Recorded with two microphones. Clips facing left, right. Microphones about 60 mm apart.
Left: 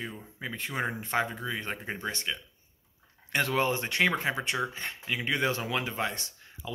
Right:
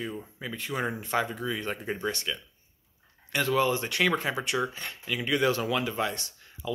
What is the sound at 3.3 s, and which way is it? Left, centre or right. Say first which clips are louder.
Speech: right 2 dB; left.